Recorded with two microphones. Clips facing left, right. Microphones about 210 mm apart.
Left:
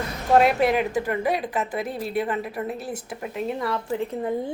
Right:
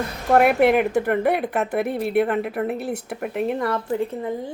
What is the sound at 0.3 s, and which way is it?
Speech, 60° right (ahead or behind).